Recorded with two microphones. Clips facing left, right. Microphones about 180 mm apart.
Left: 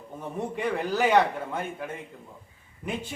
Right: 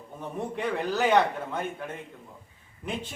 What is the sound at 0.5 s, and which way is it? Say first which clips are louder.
Speech: left 1 dB; 10° left (ahead or behind).